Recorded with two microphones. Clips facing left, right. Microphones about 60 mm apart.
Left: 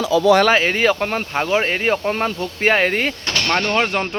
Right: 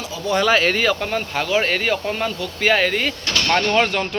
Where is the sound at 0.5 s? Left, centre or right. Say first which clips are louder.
Left 1 dB; left.